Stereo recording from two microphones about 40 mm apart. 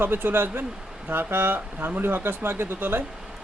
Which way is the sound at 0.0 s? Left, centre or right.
Right.